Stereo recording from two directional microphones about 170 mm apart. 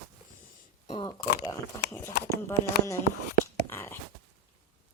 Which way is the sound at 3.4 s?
15° left (ahead or behind).